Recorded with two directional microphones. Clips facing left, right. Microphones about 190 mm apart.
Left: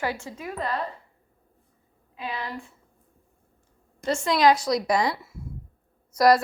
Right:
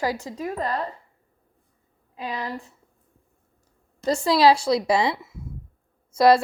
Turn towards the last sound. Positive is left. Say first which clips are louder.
# right 2 dB
turn(degrees=-25)  # may be behind; listen again after turning